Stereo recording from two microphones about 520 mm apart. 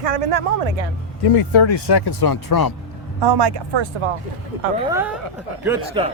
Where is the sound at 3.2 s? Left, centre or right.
Right.